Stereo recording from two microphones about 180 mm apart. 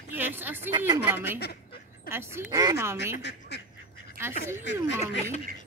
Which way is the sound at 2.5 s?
15° right (ahead or behind).